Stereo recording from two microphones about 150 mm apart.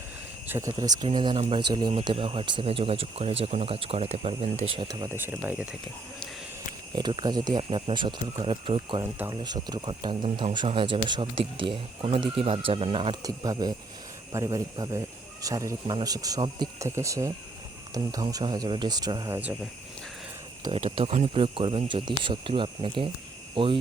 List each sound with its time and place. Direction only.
0.4 s speech: 15° right (ahead or behind)
1.0 s speech: 35° right (ahead or behind)
4.9 s speech: 25° right (ahead or behind)
5.1 s speech: 15° right (ahead or behind)
6.9 s speech: 30° right (ahead or behind)
9.1 s speech: 15° right (ahead or behind)
9.4 s speech: 30° right (ahead or behind)
13.2 s speech: 25° right (ahead or behind)
21.0 s speech: 40° right (ahead or behind)